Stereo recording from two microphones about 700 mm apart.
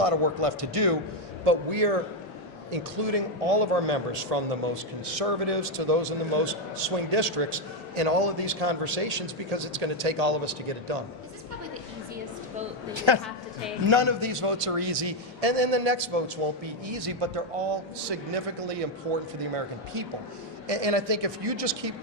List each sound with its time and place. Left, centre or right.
0.0 s a man's voice: right
12.9 s a man's voice: right
19.5 s a man's voice: right